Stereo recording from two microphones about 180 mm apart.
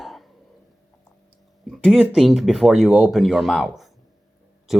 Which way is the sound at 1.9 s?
Centre (ahead or behind).